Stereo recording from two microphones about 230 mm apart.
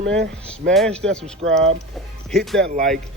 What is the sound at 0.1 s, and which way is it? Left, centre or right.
Speech, centre.